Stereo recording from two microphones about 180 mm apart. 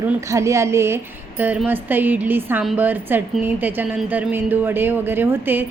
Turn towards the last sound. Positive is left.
turn(degrees=-10)  # may be behind; listen again after turning